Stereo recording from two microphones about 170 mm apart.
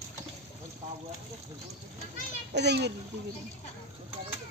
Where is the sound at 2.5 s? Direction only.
85° right.